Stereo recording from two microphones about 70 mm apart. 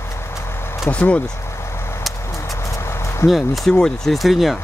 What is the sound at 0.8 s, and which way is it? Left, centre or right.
Speech, left.